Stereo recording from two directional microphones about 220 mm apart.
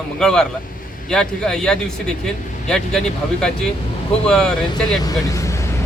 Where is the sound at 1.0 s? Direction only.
5° left (ahead or behind).